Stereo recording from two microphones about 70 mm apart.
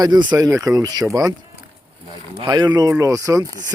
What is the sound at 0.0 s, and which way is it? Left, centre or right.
Speech, right.